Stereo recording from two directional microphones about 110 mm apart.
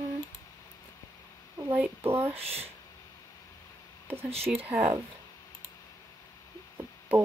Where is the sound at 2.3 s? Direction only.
65° right (ahead or behind).